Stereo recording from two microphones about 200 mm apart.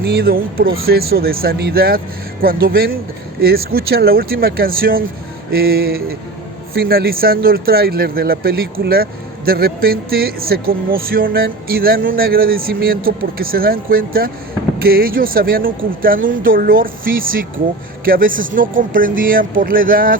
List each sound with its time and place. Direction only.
0.1 s speech: 50° right (ahead or behind)